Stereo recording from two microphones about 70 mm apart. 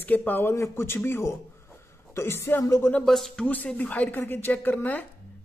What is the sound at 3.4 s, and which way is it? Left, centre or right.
Speech, left.